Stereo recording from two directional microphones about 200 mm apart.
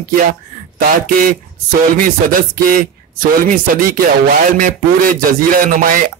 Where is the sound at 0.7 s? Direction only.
45° right (ahead or behind).